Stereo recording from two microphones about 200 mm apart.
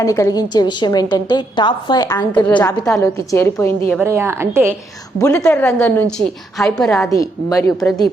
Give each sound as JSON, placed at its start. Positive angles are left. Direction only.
{"t": 0.0, "sound": "a woman's voice", "side_deg": 15}
{"t": 4.0, "sound": "a woman's voice", "side_deg": -15}
{"t": 5.2, "sound": "a woman's voice", "side_deg": 10}
{"t": 7.1, "sound": "a woman's voice", "side_deg": 15}